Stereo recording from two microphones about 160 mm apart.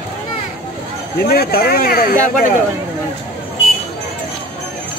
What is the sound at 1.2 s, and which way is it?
Speech, 70° left (ahead or behind).